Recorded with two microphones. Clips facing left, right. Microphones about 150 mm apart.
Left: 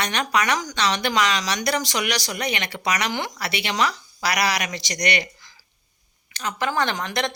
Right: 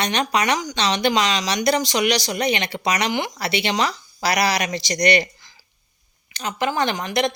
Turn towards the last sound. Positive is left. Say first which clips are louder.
# right 3 dB
turn(degrees=-10)  # may be behind; listen again after turning